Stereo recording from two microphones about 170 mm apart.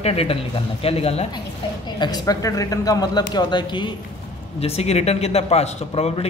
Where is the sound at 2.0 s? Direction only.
25° left (ahead or behind).